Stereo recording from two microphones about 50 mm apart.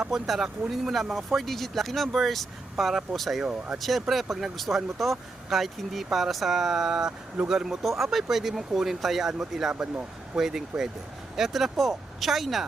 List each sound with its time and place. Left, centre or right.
0.1 s speech: centre
3.4 s speech: centre
3.8 s speech: centre
9.7 s speech: right
10.3 s speech: centre